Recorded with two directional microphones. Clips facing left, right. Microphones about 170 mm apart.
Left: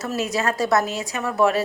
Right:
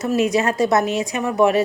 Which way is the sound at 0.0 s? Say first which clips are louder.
Right 6 dB; 15° right (ahead or behind).